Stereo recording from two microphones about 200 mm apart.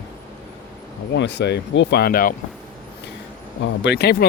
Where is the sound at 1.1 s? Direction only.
60° left (ahead or behind).